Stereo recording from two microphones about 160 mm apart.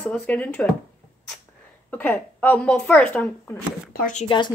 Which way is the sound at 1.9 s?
10° left (ahead or behind).